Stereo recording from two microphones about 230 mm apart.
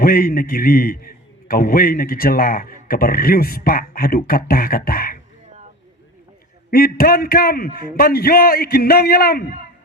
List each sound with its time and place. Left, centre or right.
0.0 s a man's voice: left
6.7 s a man's voice: left